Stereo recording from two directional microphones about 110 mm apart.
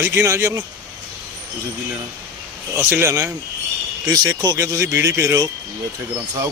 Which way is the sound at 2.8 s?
20° right (ahead or behind).